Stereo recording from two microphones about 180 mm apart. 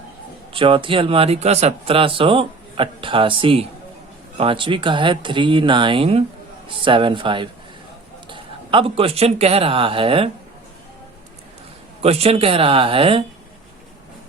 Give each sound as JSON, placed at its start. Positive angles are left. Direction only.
{"t": 0.5, "sound": "speech", "side_deg": -30}
{"t": 12.0, "sound": "speech", "side_deg": -35}